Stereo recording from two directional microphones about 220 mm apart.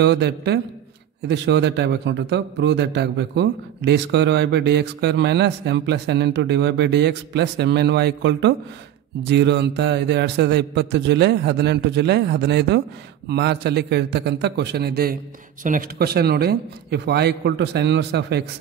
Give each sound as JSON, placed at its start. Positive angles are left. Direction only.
{"t": 0.0, "sound": "a man's voice", "side_deg": -50}